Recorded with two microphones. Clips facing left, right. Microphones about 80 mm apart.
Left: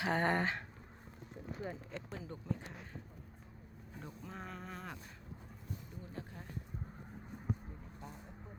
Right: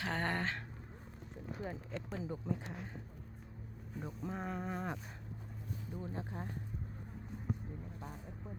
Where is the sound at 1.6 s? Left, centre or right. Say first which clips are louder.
Right 1 dB; centre.